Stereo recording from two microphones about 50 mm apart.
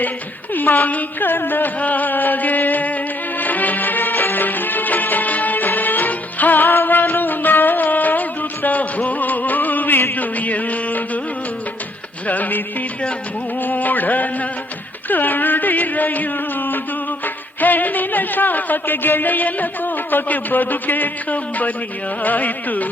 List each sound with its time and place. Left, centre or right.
0.5 s music: left
12.3 s music: left
22.2 s carnatic music: left